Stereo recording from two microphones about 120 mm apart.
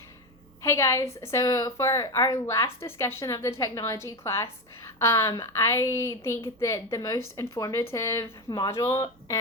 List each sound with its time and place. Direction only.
0.6 s a woman's voice: 25° left (ahead or behind)